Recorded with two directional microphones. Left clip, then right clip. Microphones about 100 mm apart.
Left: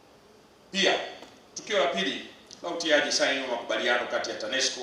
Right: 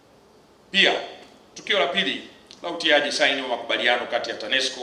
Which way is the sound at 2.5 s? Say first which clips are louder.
Right 5 dB; 15° right (ahead or behind).